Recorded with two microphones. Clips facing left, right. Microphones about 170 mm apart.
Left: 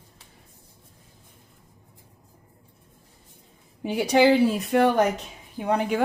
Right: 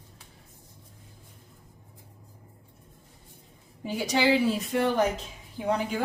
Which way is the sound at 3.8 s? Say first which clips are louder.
Left 6 dB; 60° left (ahead or behind).